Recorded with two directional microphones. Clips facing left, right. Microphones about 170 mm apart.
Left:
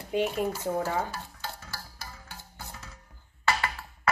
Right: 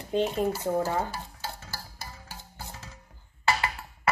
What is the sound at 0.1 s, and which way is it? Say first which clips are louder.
Speech: right 1 dB; 10° left (ahead or behind).